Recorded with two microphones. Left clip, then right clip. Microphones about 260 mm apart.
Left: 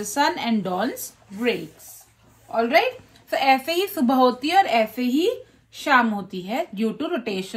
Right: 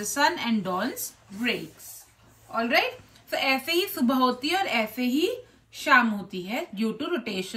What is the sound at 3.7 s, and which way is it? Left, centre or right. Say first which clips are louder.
Speech: left 4 dB; right.